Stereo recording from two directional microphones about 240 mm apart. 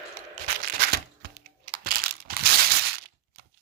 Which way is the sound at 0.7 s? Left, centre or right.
Right.